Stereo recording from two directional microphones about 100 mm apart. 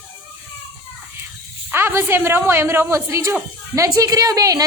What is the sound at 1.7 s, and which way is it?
A woman's voice, 25° right (ahead or behind).